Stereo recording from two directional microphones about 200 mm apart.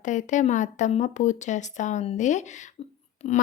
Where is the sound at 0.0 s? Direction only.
40° left (ahead or behind).